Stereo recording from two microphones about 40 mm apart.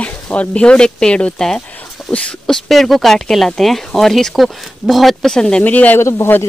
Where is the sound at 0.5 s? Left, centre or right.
Left.